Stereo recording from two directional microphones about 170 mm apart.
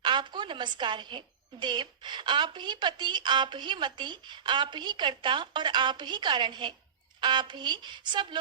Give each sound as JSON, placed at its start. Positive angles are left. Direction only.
{"t": 0.0, "sound": "a woman's voice", "side_deg": -25}